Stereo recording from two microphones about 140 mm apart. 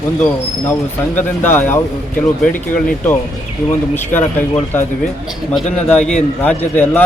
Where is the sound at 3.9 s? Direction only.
15° left (ahead or behind).